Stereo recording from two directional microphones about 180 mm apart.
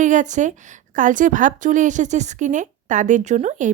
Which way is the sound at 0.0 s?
45° right (ahead or behind).